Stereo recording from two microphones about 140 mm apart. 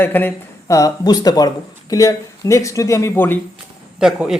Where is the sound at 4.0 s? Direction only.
5° right (ahead or behind).